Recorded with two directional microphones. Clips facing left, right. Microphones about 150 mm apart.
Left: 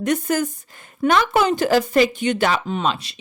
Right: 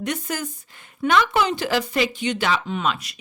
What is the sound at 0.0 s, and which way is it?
Speech, 45° left (ahead or behind).